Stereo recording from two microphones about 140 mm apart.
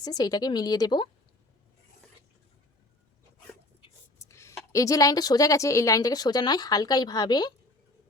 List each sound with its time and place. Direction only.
0.0 s a woman's voice: 30° left (ahead or behind)
4.3 s a woman's voice: 20° left (ahead or behind)